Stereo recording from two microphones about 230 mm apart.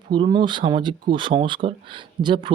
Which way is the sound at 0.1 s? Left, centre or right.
Centre.